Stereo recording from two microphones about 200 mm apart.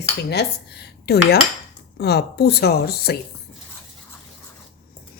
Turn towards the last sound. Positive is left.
turn(degrees=50)  # may be behind; listen again after turning